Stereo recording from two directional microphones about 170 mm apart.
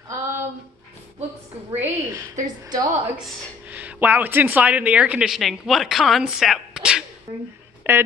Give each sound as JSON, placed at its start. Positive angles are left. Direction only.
{"t": 0.1, "sound": "a sound", "side_deg": -15}
{"t": 1.7, "sound": "a woman's voice", "side_deg": -15}
{"t": 3.7, "sound": "a woman's voice", "side_deg": -10}